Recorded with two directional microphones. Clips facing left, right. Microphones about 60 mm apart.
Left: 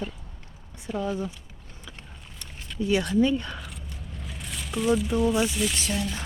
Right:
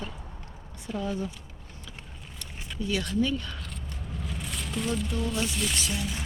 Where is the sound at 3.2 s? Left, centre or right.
Left.